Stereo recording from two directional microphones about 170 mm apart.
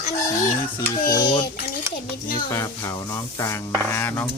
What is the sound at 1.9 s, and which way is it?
Speech, 15° right (ahead or behind).